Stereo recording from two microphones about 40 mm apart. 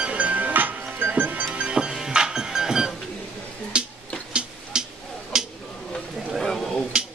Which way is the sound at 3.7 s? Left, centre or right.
Right.